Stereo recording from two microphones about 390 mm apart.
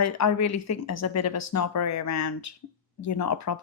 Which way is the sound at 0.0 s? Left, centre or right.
Left.